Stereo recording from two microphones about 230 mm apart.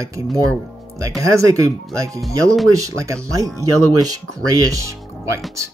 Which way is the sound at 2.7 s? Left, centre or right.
Centre.